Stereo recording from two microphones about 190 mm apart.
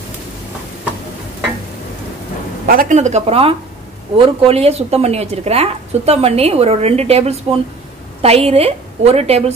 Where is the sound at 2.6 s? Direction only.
45° right (ahead or behind).